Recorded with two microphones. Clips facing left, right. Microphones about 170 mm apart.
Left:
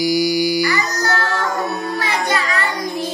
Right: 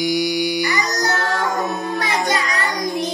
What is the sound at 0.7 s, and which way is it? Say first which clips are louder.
Child singing: left 1 dB; 20° right (ahead or behind).